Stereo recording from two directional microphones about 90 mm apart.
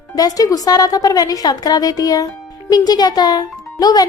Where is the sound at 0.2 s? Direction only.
45° left (ahead or behind).